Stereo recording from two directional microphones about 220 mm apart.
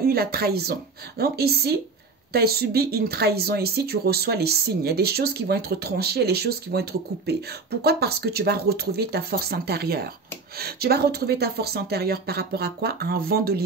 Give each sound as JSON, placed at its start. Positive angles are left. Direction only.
{"t": 0.0, "sound": "speech", "side_deg": -45}